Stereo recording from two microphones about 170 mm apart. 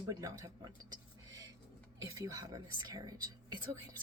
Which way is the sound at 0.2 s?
20° right (ahead or behind).